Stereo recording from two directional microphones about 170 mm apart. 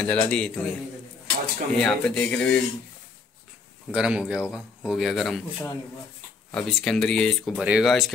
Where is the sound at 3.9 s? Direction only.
5° right (ahead or behind).